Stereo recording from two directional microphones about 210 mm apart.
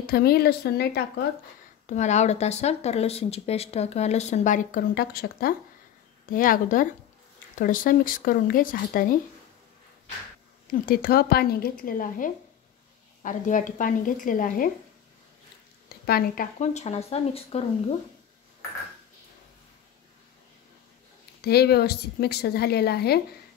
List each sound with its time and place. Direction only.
0.0 s a woman's voice: 45° left (ahead or behind)
1.9 s speech: 35° left (ahead or behind)
10.7 s a woman's voice: 45° left (ahead or behind)
15.9 s speech: 45° left (ahead or behind); by 17.6 s 30° left (ahead or behind)
21.4 s a woman's voice: 50° left (ahead or behind)